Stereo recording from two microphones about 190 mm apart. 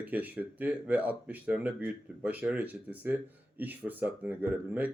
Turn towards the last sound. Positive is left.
turn(degrees=-10)  # may be behind; listen again after turning